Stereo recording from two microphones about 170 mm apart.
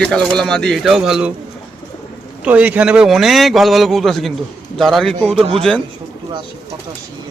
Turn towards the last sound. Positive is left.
turn(degrees=5)  # may be behind; listen again after turning